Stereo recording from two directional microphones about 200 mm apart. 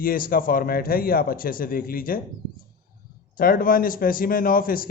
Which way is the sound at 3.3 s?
45° left (ahead or behind).